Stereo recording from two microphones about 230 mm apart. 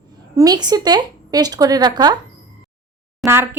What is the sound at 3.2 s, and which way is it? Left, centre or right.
Speech, centre.